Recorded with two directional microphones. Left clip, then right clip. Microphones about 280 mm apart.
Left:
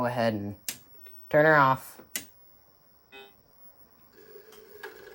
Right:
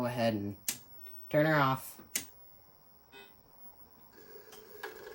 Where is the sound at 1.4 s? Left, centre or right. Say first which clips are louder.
Left 8 dB; centre.